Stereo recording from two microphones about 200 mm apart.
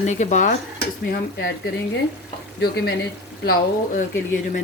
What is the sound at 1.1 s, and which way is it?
Speech, 55° left (ahead or behind).